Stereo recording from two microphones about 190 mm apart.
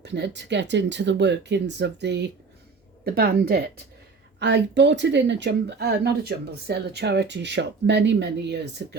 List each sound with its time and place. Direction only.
0.0 s speech: 65° right (ahead or behind)
3.0 s a woman's voice: 55° right (ahead or behind)
4.4 s speech: 65° right (ahead or behind)